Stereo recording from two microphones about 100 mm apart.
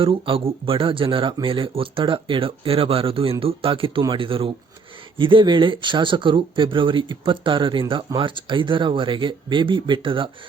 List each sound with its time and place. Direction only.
0.0 s speech: 65° right (ahead or behind)